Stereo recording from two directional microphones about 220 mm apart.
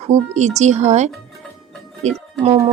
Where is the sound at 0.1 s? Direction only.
30° right (ahead or behind).